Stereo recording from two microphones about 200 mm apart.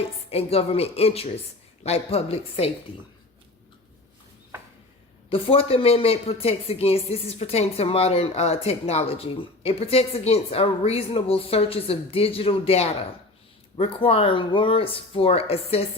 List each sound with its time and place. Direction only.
0.3 s a woman's voice: 30° left (ahead or behind)
5.3 s a woman's voice: 30° left (ahead or behind)